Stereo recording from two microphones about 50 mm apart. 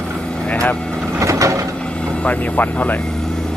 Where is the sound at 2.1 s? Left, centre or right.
Left.